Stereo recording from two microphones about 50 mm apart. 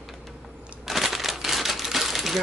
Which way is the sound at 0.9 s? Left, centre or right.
Centre.